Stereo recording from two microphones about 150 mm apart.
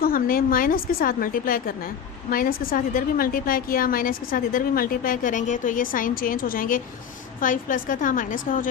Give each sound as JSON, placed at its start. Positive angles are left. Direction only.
{"t": 0.0, "sound": "a woman's voice", "side_deg": 70}